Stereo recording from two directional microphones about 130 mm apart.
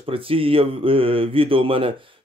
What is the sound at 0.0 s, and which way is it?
Mantra, 45° right (ahead or behind).